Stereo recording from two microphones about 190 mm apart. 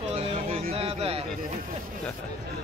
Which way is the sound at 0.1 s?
30° right (ahead or behind).